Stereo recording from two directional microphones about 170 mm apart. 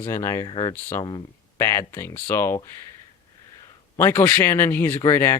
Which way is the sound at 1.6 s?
15° left (ahead or behind).